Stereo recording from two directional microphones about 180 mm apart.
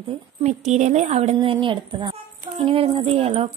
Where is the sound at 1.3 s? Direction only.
30° right (ahead or behind).